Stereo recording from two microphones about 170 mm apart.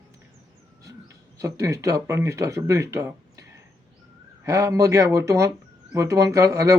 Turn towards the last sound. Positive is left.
turn(degrees=-20)  # may be behind; listen again after turning